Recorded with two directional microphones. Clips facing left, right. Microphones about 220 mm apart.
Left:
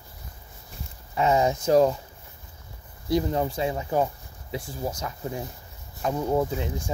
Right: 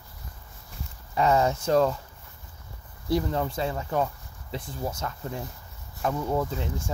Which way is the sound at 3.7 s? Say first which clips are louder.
Left 3 dB; 10° left (ahead or behind).